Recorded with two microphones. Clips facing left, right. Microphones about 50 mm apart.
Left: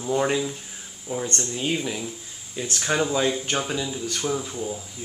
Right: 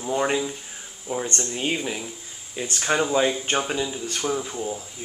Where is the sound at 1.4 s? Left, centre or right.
Right.